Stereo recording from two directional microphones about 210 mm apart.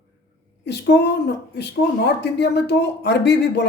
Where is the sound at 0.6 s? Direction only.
50° left (ahead or behind).